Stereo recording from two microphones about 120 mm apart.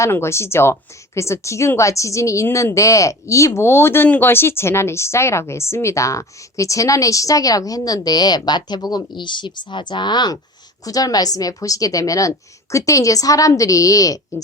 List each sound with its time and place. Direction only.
0.0 s a woman's voice: 20° left (ahead or behind)